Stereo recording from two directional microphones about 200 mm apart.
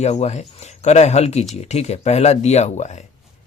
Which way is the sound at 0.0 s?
35° left (ahead or behind).